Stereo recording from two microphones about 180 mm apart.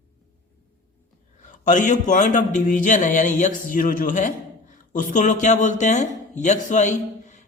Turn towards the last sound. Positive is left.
turn(degrees=40)  # may be behind; listen again after turning